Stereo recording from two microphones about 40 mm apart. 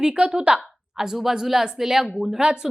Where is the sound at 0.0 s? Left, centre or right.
Centre.